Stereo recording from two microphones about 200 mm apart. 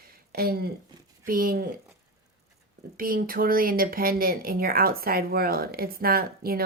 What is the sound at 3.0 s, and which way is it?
Speech, 45° right (ahead or behind).